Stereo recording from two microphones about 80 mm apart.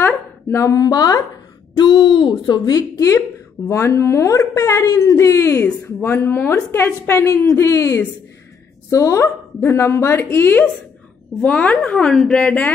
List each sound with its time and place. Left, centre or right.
0.0 s a sound: left
0.8 s speech: left
1.8 s a woman's voice: left
9.6 s a woman's voice: left
11.4 s a woman's voice: centre